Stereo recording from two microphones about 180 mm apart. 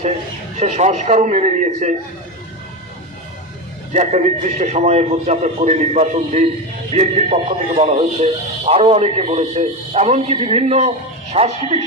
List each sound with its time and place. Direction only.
0.6 s speech: 40° right (ahead or behind)
3.9 s speech: 40° right (ahead or behind)